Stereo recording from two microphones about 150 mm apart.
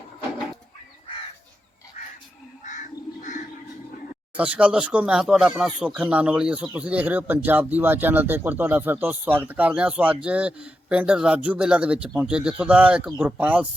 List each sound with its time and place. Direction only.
2.6 s bird: 55° left (ahead or behind)
4.4 s speech: 10° right (ahead or behind)